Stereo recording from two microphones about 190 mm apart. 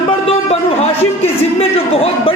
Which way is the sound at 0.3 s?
30° left (ahead or behind).